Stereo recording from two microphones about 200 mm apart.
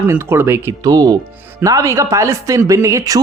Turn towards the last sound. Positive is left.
turn(degrees=-15)  # may be behind; listen again after turning